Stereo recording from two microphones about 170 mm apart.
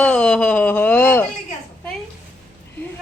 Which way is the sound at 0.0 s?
5° left (ahead or behind).